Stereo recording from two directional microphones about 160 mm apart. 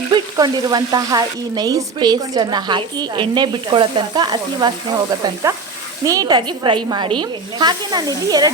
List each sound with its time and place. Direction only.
0.1 s frying: 25° right (ahead or behind)